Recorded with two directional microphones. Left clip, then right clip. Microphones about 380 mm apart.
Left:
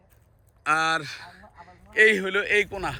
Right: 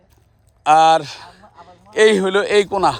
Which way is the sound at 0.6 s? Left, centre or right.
Centre.